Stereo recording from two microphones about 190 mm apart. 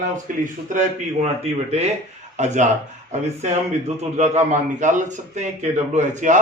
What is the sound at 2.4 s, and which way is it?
A man's voice, 40° right (ahead or behind).